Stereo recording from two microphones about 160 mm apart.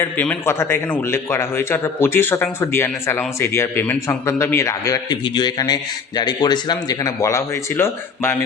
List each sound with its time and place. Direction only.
0.0 s a man's voice: 10° left (ahead or behind)